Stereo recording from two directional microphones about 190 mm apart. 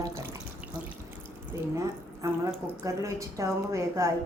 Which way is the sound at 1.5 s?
15° right (ahead or behind).